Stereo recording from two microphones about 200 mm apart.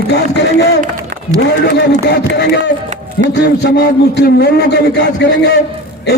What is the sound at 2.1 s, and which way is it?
A man's voice, 55° left (ahead or behind).